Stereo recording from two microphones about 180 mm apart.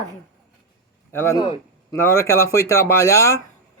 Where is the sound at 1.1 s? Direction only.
15° left (ahead or behind).